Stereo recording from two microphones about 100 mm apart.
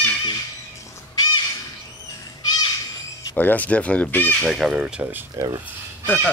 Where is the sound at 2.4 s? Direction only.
45° left (ahead or behind).